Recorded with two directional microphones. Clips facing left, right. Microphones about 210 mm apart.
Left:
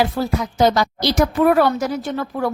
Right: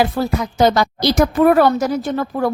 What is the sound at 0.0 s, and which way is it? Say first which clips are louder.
A woman's voice: right 2 dB; 55° right (ahead or behind).